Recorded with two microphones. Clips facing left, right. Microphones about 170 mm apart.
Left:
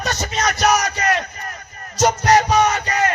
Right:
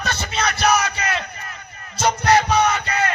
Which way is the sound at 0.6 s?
40° left (ahead or behind).